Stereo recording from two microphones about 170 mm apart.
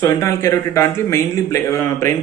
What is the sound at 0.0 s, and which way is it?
Speech, 20° left (ahead or behind).